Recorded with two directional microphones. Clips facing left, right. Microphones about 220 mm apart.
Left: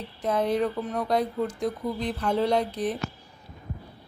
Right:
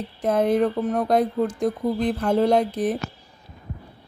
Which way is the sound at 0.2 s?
50° right (ahead or behind).